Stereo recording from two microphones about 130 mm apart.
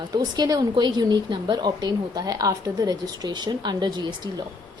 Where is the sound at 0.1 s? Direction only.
30° right (ahead or behind).